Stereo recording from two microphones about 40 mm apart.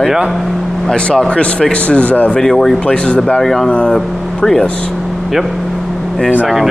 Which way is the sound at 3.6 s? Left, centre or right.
Left.